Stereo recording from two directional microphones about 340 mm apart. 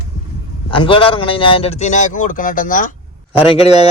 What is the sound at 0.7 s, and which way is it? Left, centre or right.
A man's voice, centre.